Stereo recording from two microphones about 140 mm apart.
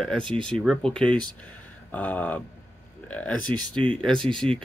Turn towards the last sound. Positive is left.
turn(degrees=5)  # may be behind; listen again after turning